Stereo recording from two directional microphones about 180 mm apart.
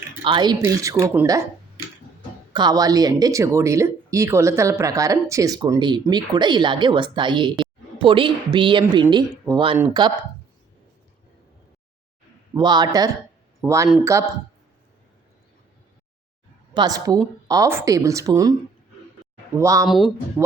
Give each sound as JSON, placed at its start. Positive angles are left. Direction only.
{"t": 0.3, "sound": "speech", "side_deg": -25}
{"t": 2.5, "sound": "speech", "side_deg": -25}
{"t": 12.5, "sound": "speech", "side_deg": -25}
{"t": 16.7, "sound": "speech", "side_deg": -20}
{"t": 19.5, "sound": "speech", "side_deg": -15}